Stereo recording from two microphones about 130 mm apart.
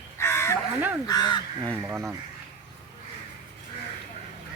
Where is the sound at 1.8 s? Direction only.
15° right (ahead or behind).